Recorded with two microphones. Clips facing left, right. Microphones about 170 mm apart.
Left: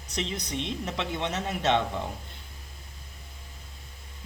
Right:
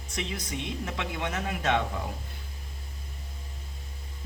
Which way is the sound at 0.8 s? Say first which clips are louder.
Left 2 dB; 20° left (ahead or behind).